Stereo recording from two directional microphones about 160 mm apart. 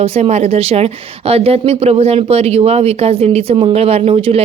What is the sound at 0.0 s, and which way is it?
A woman's voice, 40° right (ahead or behind).